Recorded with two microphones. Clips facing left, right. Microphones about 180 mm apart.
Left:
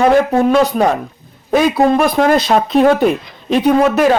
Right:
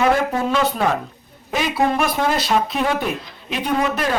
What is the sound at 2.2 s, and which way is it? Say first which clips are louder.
Speech: left 9 dB; 90° left.